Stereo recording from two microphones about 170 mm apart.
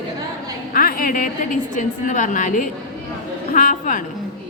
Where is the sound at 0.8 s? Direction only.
60° left (ahead or behind).